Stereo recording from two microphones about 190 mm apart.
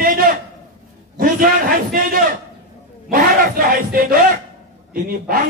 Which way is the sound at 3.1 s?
50° right (ahead or behind).